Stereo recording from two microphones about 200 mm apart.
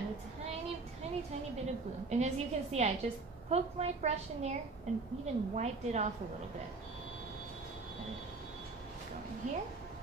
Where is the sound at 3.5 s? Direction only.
30° right (ahead or behind).